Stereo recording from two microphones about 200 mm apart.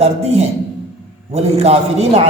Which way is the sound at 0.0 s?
30° right (ahead or behind).